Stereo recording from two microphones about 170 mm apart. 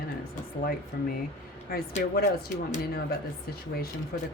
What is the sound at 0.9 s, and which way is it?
Speech, 60° left (ahead or behind).